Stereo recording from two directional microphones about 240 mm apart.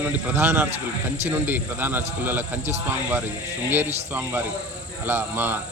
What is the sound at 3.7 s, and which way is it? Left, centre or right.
Speech, centre.